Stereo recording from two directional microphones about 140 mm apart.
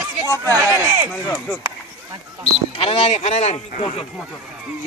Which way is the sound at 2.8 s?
45° left (ahead or behind).